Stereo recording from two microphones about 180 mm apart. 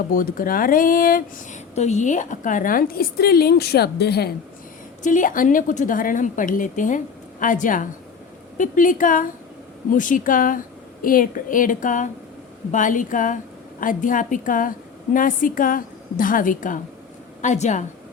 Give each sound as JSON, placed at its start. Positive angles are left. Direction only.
{"t": 0.1, "sound": "a woman's voice", "side_deg": 50}
{"t": 1.7, "sound": "a woman's voice", "side_deg": 40}
{"t": 5.0, "sound": "a woman's voice", "side_deg": 45}